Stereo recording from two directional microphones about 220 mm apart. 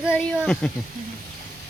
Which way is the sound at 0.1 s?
5° left (ahead or behind).